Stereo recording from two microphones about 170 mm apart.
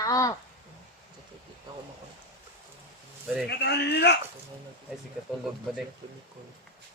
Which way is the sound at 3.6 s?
80° left.